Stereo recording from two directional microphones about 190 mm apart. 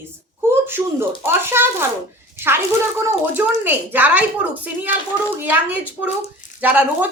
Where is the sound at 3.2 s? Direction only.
10° right (ahead or behind).